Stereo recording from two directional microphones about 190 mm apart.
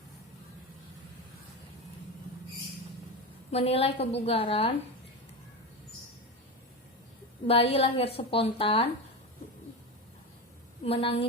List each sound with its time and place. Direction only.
3.5 s a woman's voice: 30° left (ahead or behind)
7.4 s a woman's voice: 30° left (ahead or behind)
10.8 s a woman's voice: 30° left (ahead or behind)